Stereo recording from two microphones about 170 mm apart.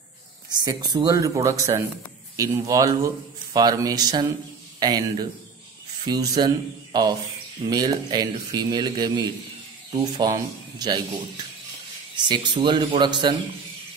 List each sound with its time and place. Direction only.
0.7 s a man's voice: 25° right (ahead or behind)
12.2 s a man's voice: 25° right (ahead or behind)